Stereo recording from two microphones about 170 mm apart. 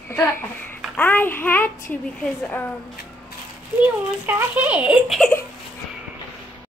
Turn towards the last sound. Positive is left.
turn(degrees=0)  # may be behind; listen again after turning